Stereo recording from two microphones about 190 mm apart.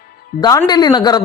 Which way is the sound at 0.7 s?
20° left (ahead or behind).